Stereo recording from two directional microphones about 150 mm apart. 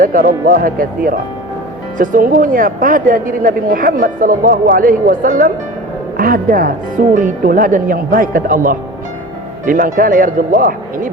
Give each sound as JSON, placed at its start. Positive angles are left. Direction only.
{"t": 0.0, "sound": "a woman's voice", "side_deg": -65}